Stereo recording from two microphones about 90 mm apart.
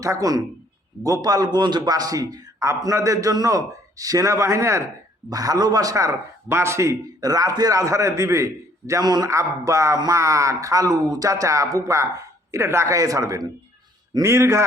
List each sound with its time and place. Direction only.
0.0 s a man's voice: 40° right (ahead or behind)
7.2 s a man's voice: 45° right (ahead or behind)
9.3 s a man's voice: 35° right (ahead or behind)